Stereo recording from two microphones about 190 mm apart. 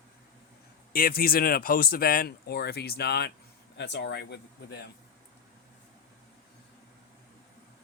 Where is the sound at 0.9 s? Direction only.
50° left (ahead or behind).